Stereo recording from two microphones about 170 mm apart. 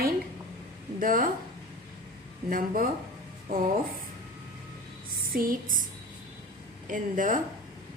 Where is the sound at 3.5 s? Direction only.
60° right (ahead or behind).